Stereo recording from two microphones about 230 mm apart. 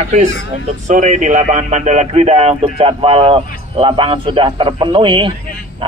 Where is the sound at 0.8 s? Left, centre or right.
Right.